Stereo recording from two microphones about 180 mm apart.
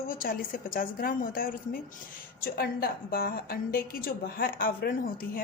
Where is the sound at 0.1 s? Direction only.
55° left (ahead or behind).